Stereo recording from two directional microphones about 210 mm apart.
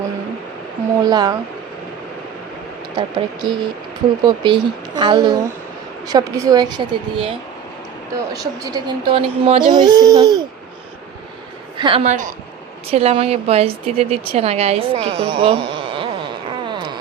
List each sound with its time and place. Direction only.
1.0 s a woman's voice: 20° right (ahead or behind)
2.9 s a woman's voice: 20° right (ahead or behind)
8.3 s a woman's voice: 15° right (ahead or behind)
11.8 s a woman's voice: 25° right (ahead or behind)
16.6 s wail: 20° right (ahead or behind)